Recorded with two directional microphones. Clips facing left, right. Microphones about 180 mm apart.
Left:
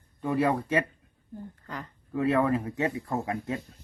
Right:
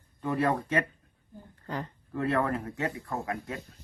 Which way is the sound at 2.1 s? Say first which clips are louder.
Left 4 dB; 10° left (ahead or behind).